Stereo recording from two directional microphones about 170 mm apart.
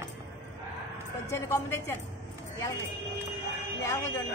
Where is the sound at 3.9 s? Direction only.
15° left (ahead or behind).